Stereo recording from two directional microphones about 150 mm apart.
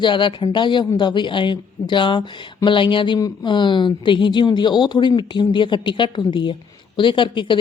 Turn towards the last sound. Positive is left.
turn(degrees=30)  # may be behind; listen again after turning